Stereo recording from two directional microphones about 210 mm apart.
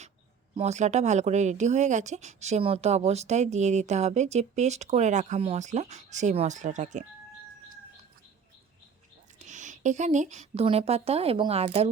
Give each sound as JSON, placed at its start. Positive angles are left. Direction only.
{"t": 0.5, "sound": "speech", "side_deg": -30}
{"t": 9.4, "sound": "speech", "side_deg": -35}